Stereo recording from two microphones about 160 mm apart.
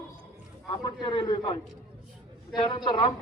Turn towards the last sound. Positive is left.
turn(degrees=30)  # may be behind; listen again after turning